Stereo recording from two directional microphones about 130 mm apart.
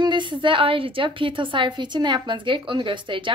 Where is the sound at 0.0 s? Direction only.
35° right (ahead or behind).